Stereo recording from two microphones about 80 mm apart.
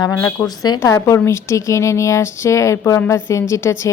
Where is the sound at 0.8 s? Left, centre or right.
Left.